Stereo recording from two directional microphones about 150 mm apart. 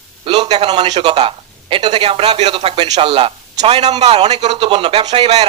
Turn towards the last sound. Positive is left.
turn(degrees=-40)  # may be behind; listen again after turning